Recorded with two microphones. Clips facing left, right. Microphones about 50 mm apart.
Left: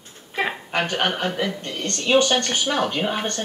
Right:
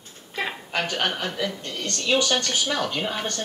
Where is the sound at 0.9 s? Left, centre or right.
Left.